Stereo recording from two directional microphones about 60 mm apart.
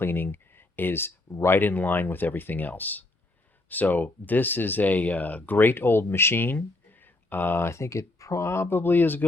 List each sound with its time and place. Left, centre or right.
0.0 s speech: left